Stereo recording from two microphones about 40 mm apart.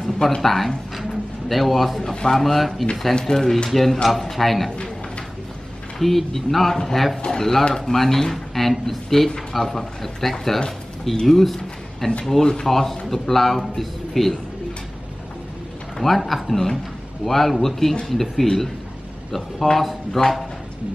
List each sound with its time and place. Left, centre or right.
0.4 s a man's voice: centre
3.7 s a man's voice: centre
4.6 s a sound: left
5.9 s a man's voice: centre
16.0 s a man's voice: centre